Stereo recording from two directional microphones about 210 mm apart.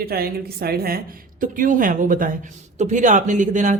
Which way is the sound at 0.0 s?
45° right (ahead or behind).